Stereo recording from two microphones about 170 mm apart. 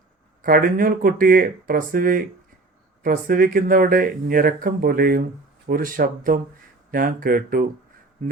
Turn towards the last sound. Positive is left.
turn(degrees=-55)  # may be behind; listen again after turning